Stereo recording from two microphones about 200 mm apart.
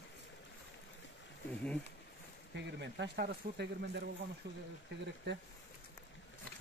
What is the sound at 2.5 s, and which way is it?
Speech, 60° right (ahead or behind).